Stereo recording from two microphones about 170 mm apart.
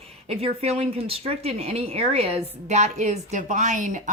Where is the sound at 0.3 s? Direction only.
35° right (ahead or behind).